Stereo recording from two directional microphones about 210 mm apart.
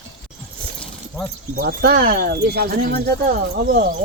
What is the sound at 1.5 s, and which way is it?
Speech, 50° right (ahead or behind).